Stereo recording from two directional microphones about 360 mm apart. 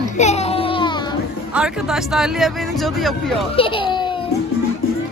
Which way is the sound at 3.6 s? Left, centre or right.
Centre.